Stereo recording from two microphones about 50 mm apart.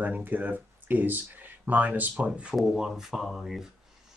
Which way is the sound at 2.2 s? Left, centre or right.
Right.